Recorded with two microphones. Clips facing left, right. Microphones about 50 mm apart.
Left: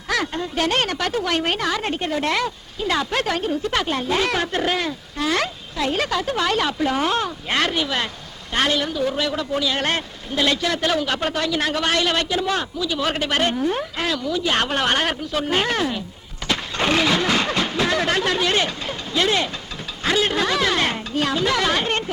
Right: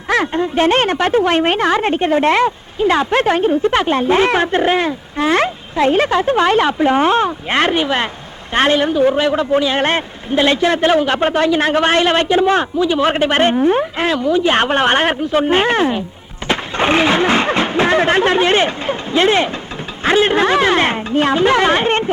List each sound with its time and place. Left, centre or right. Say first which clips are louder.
0.1 s a woman's voice: right 8 dB; right